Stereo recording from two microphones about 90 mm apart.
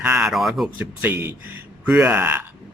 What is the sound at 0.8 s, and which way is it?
Speech, 20° right (ahead or behind).